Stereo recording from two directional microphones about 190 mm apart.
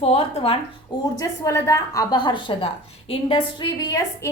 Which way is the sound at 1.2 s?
15° left (ahead or behind).